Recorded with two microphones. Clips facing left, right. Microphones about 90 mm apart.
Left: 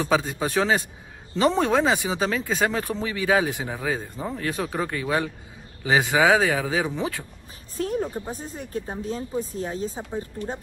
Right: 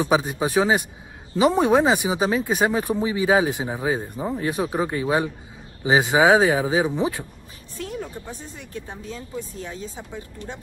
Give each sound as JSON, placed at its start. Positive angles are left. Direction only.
{"t": 0.0, "sound": "a man's voice", "side_deg": -15}
{"t": 7.7, "sound": "speech", "side_deg": 40}